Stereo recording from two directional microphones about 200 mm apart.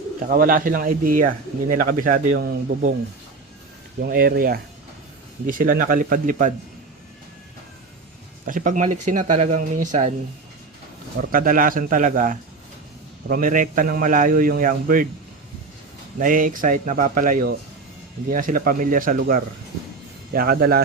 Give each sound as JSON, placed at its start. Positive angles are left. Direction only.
{"t": 0.2, "sound": "a man's voice", "side_deg": -45}
{"t": 4.0, "sound": "a man's voice", "side_deg": -50}
{"t": 8.4, "sound": "speech", "side_deg": -40}
{"t": 11.2, "sound": "a man's voice", "side_deg": -45}
{"t": 16.1, "sound": "a man's voice", "side_deg": -40}